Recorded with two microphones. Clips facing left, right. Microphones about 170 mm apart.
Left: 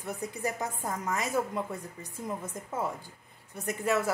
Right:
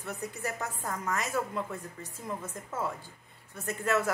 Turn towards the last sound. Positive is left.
turn(degrees=10)  # may be behind; listen again after turning